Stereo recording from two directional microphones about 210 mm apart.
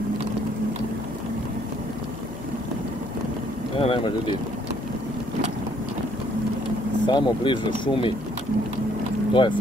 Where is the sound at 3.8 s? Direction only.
25° left (ahead or behind).